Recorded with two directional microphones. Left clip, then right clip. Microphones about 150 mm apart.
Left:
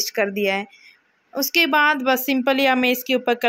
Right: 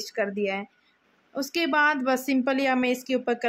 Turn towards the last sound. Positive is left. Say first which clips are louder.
# left 6 dB
turn(degrees=20)  # may be behind; listen again after turning